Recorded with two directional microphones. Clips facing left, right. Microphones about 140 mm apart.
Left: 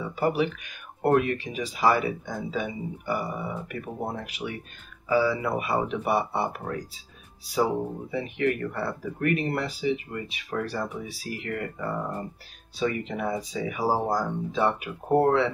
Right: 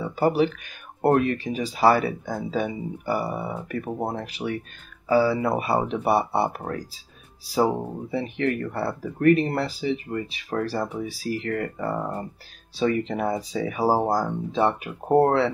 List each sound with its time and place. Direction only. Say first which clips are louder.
0.0 s speech: right 4 dB; 35° right (ahead or behind)
8.1 s speech: right 2 dB; 35° right (ahead or behind)